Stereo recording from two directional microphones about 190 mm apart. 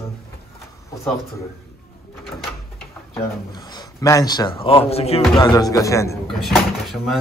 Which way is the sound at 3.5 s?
20° left (ahead or behind).